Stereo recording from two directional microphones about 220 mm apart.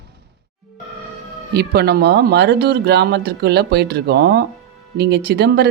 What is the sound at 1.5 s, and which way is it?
Speech, 45° right (ahead or behind).